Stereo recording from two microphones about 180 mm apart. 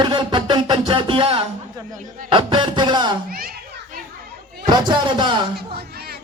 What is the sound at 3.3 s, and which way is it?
Speech, 55° right (ahead or behind).